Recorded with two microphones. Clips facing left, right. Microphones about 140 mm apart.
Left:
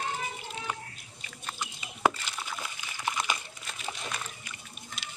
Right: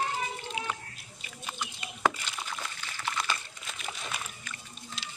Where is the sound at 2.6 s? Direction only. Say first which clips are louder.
Even; 15° left (ahead or behind).